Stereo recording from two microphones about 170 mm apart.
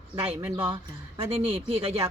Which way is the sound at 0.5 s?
25° right (ahead or behind).